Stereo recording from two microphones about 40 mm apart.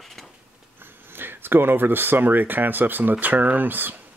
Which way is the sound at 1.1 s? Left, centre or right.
Right.